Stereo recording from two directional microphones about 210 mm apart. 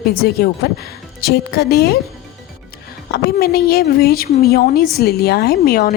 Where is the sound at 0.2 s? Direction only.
45° left (ahead or behind).